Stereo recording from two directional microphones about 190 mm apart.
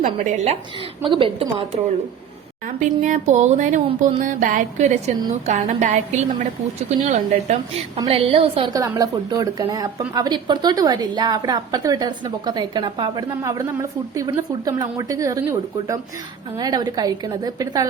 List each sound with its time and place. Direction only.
0.0 s a woman's voice: 40° right (ahead or behind)
2.6 s a woman's voice: 40° right (ahead or behind); by 17.8 s 20° right (ahead or behind)